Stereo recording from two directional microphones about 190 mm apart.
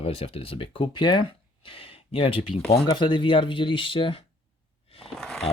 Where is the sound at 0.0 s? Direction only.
30° left (ahead or behind).